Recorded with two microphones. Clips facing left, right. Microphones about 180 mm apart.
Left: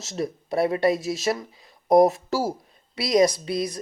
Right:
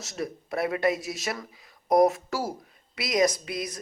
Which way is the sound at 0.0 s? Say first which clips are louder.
Left 4 dB; 25° left (ahead or behind).